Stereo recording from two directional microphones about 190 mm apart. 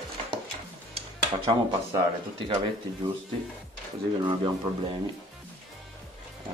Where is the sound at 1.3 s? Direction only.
25° right (ahead or behind).